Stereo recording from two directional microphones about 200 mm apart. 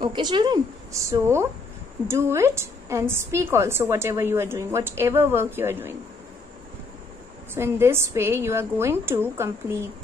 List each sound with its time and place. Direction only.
0.0 s a woman's voice: 25° right (ahead or behind)
7.5 s a woman's voice: 10° right (ahead or behind)